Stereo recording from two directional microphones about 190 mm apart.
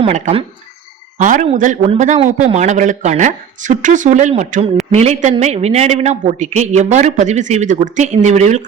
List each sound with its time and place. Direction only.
0.0 s speech: 30° right (ahead or behind)
1.2 s a man's voice: 40° right (ahead or behind)